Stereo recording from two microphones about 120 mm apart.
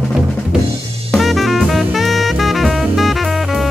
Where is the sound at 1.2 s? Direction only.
Centre (ahead or behind).